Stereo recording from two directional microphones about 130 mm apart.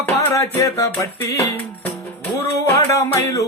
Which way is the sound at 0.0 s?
20° left (ahead or behind).